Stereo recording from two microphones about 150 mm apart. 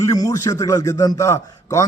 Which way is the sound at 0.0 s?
25° left (ahead or behind).